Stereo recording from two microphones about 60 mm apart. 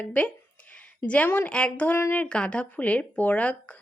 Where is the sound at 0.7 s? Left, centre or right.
Left.